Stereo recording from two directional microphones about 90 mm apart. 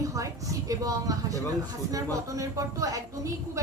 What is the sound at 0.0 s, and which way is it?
Speech, 40° right (ahead or behind).